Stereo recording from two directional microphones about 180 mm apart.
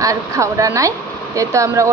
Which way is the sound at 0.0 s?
20° right (ahead or behind).